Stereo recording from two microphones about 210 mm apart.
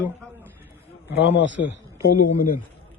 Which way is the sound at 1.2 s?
60° left (ahead or behind).